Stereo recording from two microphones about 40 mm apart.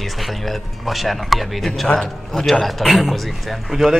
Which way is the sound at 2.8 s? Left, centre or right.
Centre.